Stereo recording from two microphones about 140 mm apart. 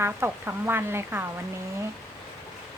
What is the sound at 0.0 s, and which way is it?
Speech, 15° right (ahead or behind).